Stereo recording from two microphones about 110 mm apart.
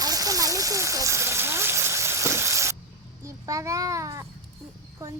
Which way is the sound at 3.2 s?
30° right (ahead or behind).